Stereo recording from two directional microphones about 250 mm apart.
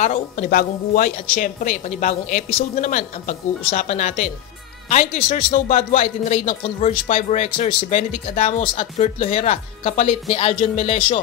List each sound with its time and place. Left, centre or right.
0.0 s a woman's voice: left